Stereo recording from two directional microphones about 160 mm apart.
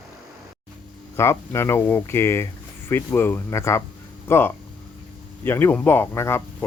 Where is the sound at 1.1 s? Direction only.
15° left (ahead or behind).